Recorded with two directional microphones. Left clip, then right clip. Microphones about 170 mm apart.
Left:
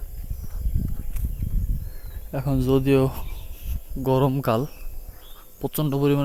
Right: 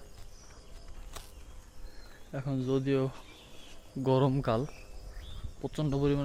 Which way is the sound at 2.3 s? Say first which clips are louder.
Left 10 dB; 50° left (ahead or behind).